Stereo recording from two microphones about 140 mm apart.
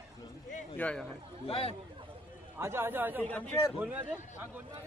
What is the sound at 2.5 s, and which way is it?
Speech, 15° right (ahead or behind).